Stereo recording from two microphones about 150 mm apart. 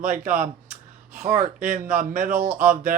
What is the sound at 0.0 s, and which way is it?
Speech, 65° right (ahead or behind).